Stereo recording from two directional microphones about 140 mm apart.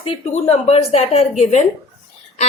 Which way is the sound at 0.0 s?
45° left (ahead or behind).